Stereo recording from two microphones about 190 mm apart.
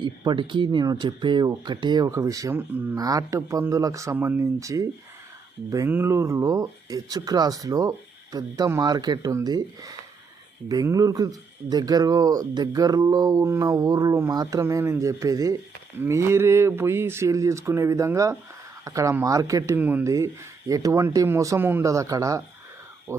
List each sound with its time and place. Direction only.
0.0 s speech: 25° right (ahead or behind)